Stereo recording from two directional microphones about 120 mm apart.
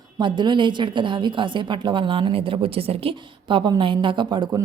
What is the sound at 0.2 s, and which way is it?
A woman's voice, 40° right (ahead or behind).